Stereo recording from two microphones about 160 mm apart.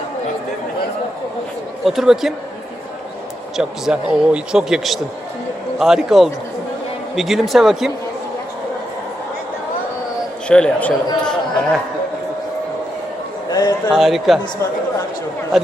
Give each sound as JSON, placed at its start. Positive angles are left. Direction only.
{"t": 1.8, "sound": "speech", "side_deg": 0}
{"t": 3.6, "sound": "speech", "side_deg": -5}
{"t": 10.5, "sound": "speech", "side_deg": 5}
{"t": 11.2, "sound": "chatter", "side_deg": 5}
{"t": 13.5, "sound": "a sound", "side_deg": 25}
{"t": 13.9, "sound": "speech", "side_deg": 0}
{"t": 15.5, "sound": "a man's voice", "side_deg": 0}